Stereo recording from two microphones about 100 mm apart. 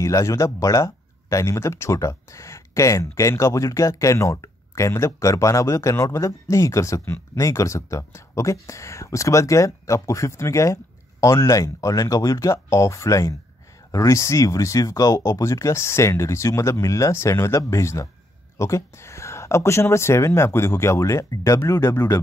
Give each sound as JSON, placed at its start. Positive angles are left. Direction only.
{"t": 0.0, "sound": "speech", "side_deg": 30}